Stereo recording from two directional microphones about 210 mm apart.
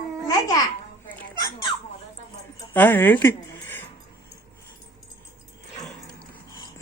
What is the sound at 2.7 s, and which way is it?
Speech, 10° left (ahead or behind).